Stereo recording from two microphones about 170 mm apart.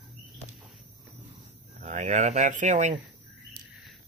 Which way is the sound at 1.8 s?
45° right (ahead or behind).